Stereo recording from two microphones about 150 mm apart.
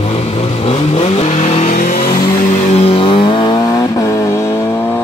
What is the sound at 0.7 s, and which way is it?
Vehicle, 45° left (ahead or behind).